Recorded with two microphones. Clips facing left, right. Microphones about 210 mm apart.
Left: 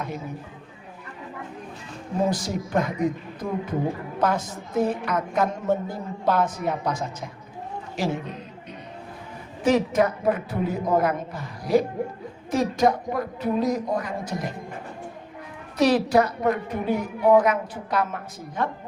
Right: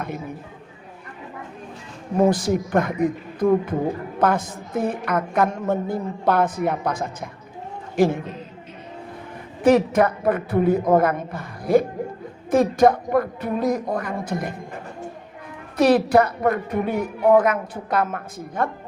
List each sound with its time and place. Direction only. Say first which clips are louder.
2.1 s a woman's voice: right 6 dB; 55° right (ahead or behind)
9.6 s a woman's voice: right 4 dB; 55° right (ahead or behind)
15.8 s a woman's voice: right 3 dB; 55° right (ahead or behind)